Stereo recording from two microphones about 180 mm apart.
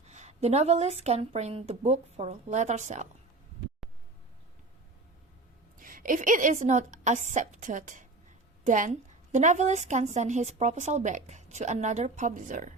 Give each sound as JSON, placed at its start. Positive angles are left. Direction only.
{"t": 0.0, "sound": "a woman's voice", "side_deg": -40}
{"t": 5.7, "sound": "a woman's voice", "side_deg": -50}